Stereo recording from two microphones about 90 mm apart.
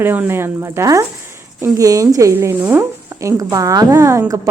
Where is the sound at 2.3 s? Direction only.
20° right (ahead or behind).